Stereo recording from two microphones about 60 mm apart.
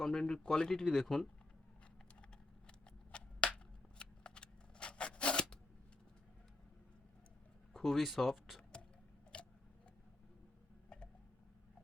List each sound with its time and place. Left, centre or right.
0.0 s speech: centre
2.6 s shuffling cards: centre
7.7 s speech: centre
9.3 s tick-tock: centre